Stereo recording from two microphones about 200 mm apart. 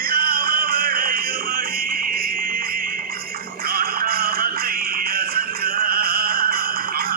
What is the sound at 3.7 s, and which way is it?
Music, 45° right (ahead or behind).